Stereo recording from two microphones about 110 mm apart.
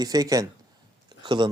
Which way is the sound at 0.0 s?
35° right (ahead or behind).